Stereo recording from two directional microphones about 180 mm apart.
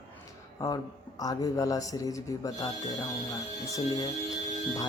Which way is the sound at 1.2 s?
20° left (ahead or behind).